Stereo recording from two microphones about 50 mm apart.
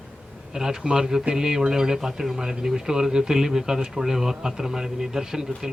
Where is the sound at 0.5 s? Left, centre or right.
Centre.